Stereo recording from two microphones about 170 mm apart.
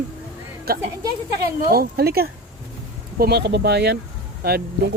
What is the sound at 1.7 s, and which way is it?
Speech, 65° right (ahead or behind).